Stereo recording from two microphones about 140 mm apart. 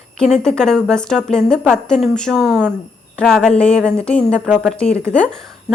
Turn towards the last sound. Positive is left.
turn(degrees=5)  # may be behind; listen again after turning